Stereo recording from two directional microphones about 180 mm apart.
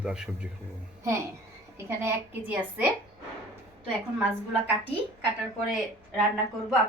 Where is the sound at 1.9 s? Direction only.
10° right (ahead or behind).